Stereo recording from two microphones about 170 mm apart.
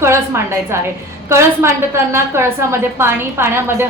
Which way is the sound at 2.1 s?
15° right (ahead or behind).